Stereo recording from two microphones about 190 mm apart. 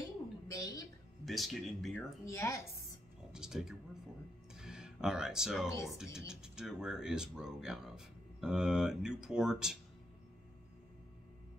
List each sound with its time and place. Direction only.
0.0 s a sound: 15° left (ahead or behind)
1.2 s speech: centre (ahead or behind)
2.2 s a woman's voice: 15° left (ahead or behind)
3.3 s speech: 5° right (ahead or behind)
4.6 s a sound: 5° right (ahead or behind)
5.9 s speech: 5° right (ahead or behind)